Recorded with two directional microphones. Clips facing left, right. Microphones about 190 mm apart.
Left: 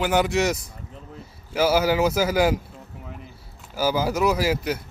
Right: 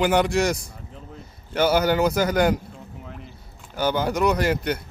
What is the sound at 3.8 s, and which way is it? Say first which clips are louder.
A man's voice: even; 5° left (ahead or behind).